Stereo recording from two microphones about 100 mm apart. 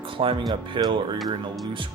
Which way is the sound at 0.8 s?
45° right (ahead or behind).